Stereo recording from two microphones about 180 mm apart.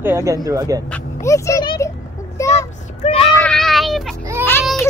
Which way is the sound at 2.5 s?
40° left (ahead or behind).